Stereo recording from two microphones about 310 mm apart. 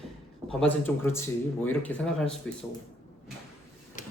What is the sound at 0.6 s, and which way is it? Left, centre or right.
Speech, centre.